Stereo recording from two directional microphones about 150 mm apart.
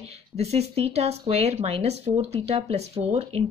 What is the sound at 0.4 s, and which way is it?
Speech, 45° right (ahead or behind).